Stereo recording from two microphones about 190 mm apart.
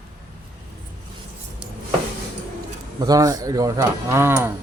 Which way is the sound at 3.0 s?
20° right (ahead or behind).